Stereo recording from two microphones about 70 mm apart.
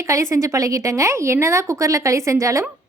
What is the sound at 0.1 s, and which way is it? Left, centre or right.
A woman's voice, right.